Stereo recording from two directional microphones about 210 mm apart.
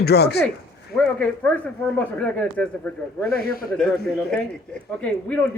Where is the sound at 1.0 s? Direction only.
5° left (ahead or behind).